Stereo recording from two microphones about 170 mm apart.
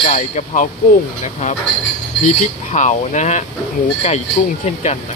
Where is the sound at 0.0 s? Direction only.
45° left (ahead or behind).